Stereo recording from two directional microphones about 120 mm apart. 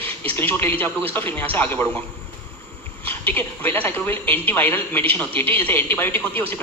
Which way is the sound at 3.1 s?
15° left (ahead or behind).